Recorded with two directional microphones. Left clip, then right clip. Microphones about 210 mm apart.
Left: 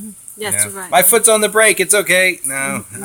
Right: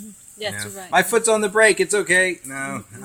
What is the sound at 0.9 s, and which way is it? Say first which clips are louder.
Speech: left 5 dB; 35° left (ahead or behind).